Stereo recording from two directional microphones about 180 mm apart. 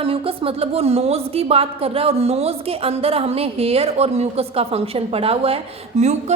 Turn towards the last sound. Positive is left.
turn(degrees=-35)  # may be behind; listen again after turning